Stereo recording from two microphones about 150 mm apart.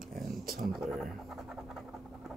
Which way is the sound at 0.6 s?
Centre (ahead or behind).